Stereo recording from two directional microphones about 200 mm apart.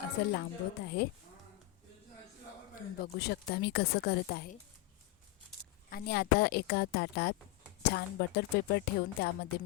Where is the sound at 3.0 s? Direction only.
55° left (ahead or behind).